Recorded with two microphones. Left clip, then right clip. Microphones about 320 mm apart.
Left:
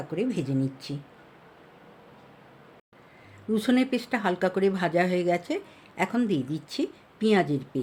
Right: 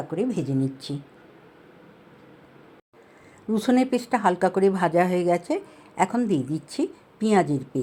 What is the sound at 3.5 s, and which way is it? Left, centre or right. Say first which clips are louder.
Speech: right 3 dB; centre.